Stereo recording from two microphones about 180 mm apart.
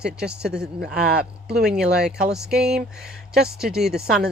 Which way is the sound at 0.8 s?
60° right (ahead or behind).